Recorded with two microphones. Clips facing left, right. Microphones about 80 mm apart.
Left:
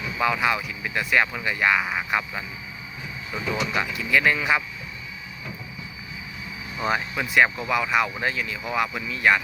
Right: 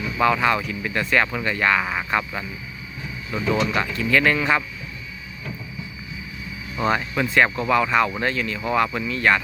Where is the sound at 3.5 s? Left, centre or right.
Centre.